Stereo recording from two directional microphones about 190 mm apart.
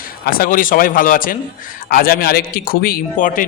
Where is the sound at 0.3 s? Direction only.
50° left (ahead or behind).